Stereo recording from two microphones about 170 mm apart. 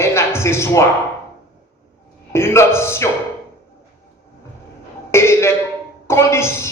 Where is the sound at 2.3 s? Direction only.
15° left (ahead or behind).